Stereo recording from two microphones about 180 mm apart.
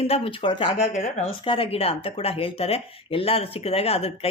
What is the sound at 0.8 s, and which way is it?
Speech, 40° left (ahead or behind).